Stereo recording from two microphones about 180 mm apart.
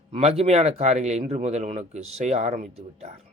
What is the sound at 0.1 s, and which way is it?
Speech, 35° right (ahead or behind).